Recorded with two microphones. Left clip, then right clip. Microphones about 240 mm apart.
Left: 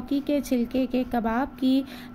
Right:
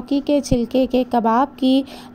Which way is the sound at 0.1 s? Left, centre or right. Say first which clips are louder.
Right 7 dB; centre.